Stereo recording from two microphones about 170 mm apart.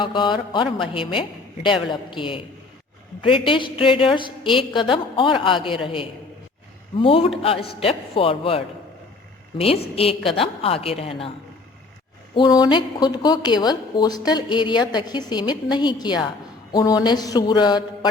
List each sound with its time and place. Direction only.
0.0 s a woman's voice: 30° left (ahead or behind)
7.0 s a woman's voice: 35° left (ahead or behind)
12.3 s a woman's voice: 25° left (ahead or behind)